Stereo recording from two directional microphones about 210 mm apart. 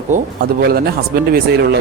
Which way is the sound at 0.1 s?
35° right (ahead or behind).